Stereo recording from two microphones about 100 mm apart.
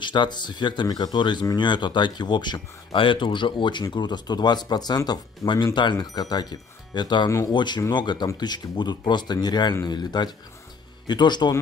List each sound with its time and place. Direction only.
0.0 s speech: 50° left (ahead or behind)
7.2 s speech: 30° left (ahead or behind)
7.5 s speech: 45° left (ahead or behind)